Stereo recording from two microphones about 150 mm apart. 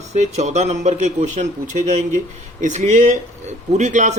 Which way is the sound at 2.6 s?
55° right (ahead or behind).